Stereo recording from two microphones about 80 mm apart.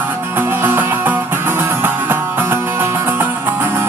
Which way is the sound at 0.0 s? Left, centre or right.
Right.